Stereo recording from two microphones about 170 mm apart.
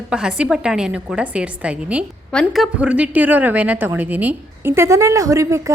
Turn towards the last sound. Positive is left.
turn(degrees=-20)  # may be behind; listen again after turning